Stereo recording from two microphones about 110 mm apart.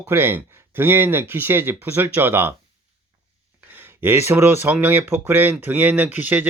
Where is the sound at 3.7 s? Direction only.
20° right (ahead or behind).